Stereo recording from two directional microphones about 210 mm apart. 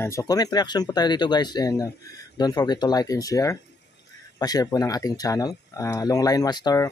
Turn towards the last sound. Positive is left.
turn(degrees=20)  # may be behind; listen again after turning